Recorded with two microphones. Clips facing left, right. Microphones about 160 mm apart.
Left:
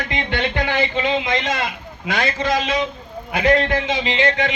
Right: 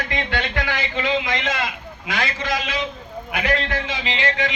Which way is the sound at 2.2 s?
30° left (ahead or behind).